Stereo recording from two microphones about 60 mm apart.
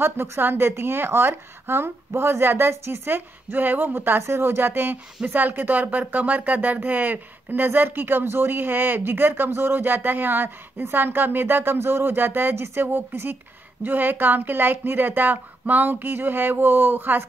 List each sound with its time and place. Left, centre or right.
0.0 s a woman's voice: right